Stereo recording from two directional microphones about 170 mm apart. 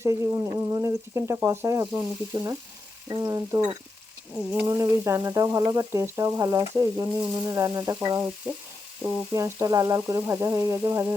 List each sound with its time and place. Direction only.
0.0 s frying: 20° right (ahead or behind)
3.1 s speech: 20° right (ahead or behind)
4.6 s frying: 20° right (ahead or behind)